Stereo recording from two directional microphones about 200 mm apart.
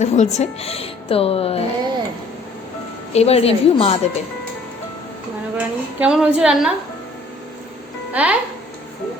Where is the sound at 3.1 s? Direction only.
30° left (ahead or behind).